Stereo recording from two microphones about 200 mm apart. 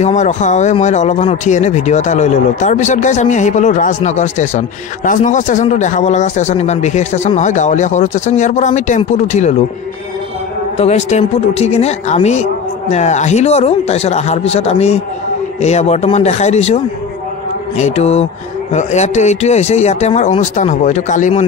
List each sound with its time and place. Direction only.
0.0 s speech: 35° left (ahead or behind)
10.8 s speech: 35° left (ahead or behind)